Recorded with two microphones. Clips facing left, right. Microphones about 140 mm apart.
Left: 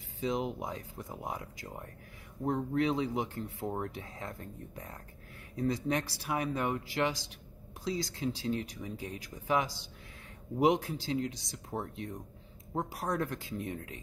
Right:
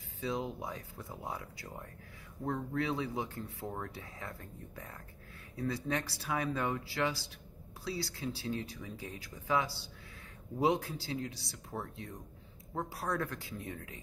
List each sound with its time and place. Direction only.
0.2 s speech: 20° left (ahead or behind)
5.6 s speech: 15° left (ahead or behind)